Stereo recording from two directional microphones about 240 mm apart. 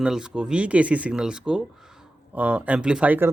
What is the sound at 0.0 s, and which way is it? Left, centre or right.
Speech, centre.